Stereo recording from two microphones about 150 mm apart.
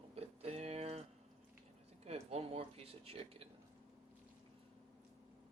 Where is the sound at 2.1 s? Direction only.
45° right (ahead or behind).